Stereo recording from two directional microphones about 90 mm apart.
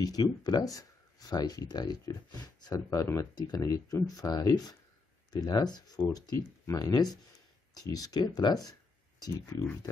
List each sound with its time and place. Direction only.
0.0 s speech: 45° left (ahead or behind)